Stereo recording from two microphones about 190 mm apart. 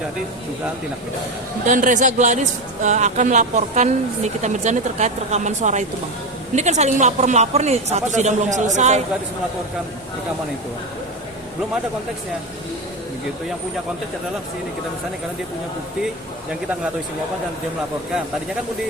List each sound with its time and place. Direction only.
1.6 s speech: 45° right (ahead or behind)